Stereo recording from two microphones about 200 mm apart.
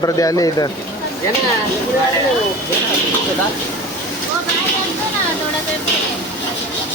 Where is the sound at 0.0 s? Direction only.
15° left (ahead or behind).